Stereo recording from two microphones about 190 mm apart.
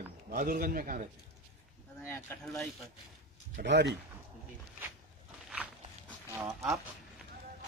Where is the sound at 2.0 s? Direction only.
15° left (ahead or behind).